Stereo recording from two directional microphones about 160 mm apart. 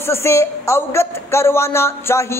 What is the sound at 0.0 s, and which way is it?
Speech, 15° left (ahead or behind).